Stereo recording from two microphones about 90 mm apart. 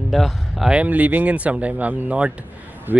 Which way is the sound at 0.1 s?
Centre (ahead or behind).